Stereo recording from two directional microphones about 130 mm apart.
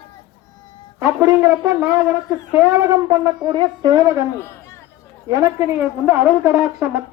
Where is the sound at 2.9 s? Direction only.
30° right (ahead or behind).